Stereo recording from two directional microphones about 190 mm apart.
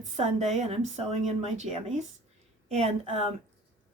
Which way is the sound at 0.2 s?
35° right (ahead or behind).